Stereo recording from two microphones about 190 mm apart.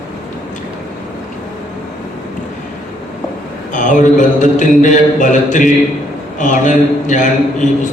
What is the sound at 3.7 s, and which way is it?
A man's voice, 40° left (ahead or behind).